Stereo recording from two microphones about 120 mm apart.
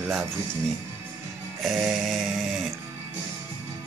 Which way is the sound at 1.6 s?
Centre (ahead or behind).